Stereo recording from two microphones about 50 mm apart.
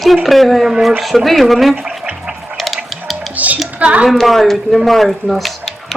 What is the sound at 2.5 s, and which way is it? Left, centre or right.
Music, centre.